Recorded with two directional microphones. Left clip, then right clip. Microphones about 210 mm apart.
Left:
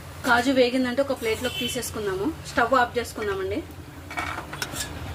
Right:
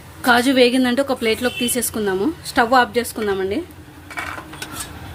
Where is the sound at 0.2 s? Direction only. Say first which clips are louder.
Right 6 dB; 40° right (ahead or behind).